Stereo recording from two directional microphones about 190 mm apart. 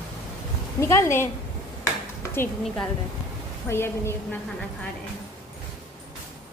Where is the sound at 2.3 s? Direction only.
10° left (ahead or behind).